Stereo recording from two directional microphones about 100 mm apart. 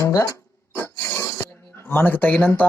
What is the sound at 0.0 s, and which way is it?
Music, 30° left (ahead or behind).